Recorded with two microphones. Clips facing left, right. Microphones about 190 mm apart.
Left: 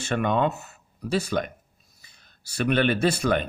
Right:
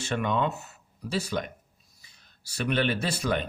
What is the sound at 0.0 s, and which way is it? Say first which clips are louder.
Speech: left 4 dB; 55° left (ahead or behind).